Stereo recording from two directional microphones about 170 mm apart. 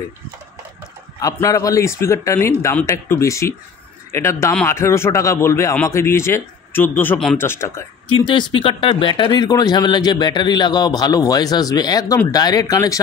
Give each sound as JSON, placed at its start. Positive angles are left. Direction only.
{"t": 1.2, "sound": "speech", "side_deg": 20}
{"t": 8.1, "sound": "speech", "side_deg": 25}